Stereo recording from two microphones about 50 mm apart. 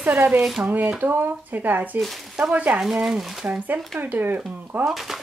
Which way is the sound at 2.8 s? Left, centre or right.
Centre.